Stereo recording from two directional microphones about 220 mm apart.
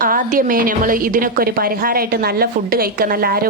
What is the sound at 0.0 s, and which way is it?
A woman's voice, 40° right (ahead or behind).